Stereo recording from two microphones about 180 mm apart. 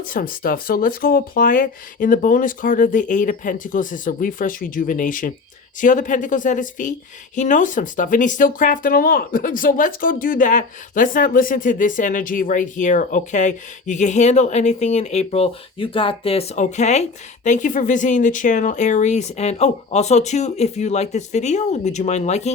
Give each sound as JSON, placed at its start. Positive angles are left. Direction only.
{"t": 0.0, "sound": "speech", "side_deg": 50}